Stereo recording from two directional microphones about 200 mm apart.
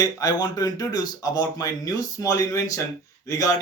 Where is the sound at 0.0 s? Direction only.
20° left (ahead or behind).